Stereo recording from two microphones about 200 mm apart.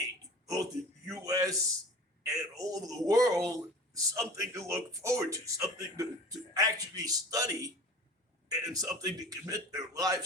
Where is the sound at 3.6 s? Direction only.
15° right (ahead or behind).